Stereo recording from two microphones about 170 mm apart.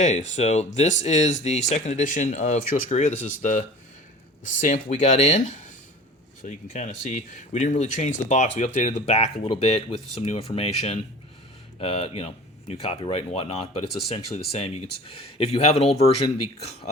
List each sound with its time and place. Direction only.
0.0 s speech: 45° left (ahead or behind)
15.0 s speech: 35° left (ahead or behind)